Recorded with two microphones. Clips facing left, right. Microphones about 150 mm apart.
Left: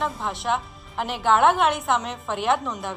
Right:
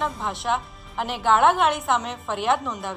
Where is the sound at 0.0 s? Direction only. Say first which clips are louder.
Even; centre (ahead or behind).